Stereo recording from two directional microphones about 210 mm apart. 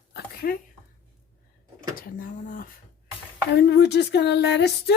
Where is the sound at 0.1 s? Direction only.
45° left (ahead or behind).